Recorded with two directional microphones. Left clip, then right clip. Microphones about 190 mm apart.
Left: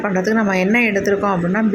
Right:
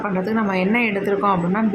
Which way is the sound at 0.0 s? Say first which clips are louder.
Left 4 dB; 20° left (ahead or behind).